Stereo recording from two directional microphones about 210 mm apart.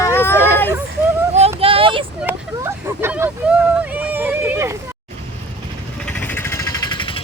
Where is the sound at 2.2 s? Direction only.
10° right (ahead or behind).